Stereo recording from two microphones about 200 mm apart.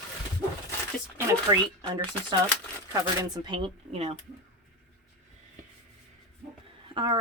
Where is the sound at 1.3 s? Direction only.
15° right (ahead or behind).